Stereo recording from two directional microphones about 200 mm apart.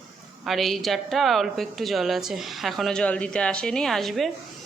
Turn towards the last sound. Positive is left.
turn(degrees=0)  # may be behind; listen again after turning